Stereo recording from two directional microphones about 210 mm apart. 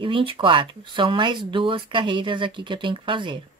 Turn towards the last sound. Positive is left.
turn(degrees=-25)  # may be behind; listen again after turning